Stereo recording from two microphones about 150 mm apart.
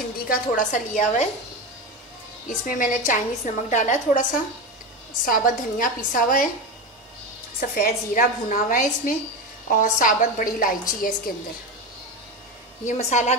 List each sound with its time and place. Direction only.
0.3 s a woman's voice: 60° left (ahead or behind)
2.4 s a woman's voice: 60° left (ahead or behind)
7.7 s a woman's voice: 65° left (ahead or behind)
12.8 s a woman's voice: 50° left (ahead or behind)